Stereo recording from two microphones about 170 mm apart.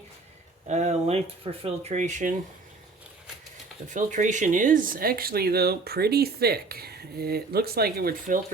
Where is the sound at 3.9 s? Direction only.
45° right (ahead or behind).